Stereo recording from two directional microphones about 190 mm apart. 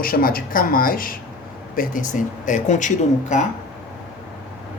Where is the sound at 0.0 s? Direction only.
50° left (ahead or behind).